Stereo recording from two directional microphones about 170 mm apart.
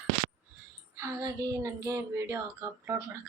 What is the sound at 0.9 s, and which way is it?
Speech, 15° right (ahead or behind).